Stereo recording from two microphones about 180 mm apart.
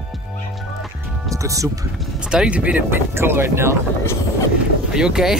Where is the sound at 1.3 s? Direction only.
20° right (ahead or behind).